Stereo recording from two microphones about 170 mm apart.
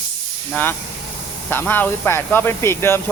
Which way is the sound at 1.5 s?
10° left (ahead or behind).